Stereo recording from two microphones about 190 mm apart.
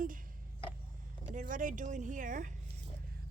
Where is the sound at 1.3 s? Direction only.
45° right (ahead or behind).